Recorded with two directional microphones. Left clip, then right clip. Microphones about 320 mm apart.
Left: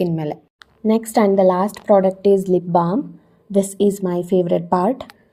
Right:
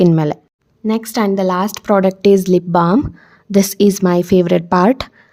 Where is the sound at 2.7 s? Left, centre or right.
Right.